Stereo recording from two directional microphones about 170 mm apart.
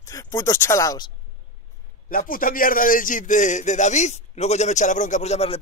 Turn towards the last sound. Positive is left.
turn(degrees=40)  # may be behind; listen again after turning